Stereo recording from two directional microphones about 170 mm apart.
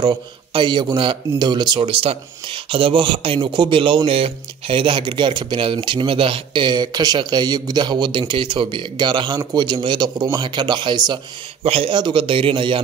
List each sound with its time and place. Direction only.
0.0 s a man's voice: 30° right (ahead or behind)